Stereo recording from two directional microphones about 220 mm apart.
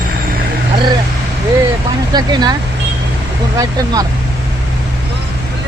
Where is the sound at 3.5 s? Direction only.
15° right (ahead or behind).